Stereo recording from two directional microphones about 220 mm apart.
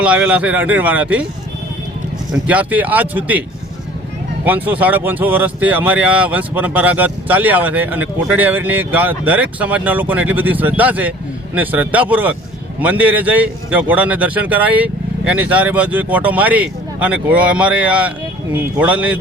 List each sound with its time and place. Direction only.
0.0 s speech: 5° right (ahead or behind)
2.3 s speech: 5° right (ahead or behind)
4.4 s speech: 10° right (ahead or behind)